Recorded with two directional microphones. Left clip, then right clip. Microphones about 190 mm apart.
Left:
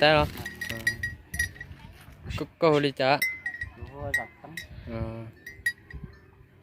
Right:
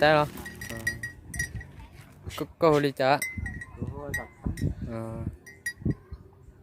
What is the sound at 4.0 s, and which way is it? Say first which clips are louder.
Speech: left 5 dB; 40° left (ahead or behind).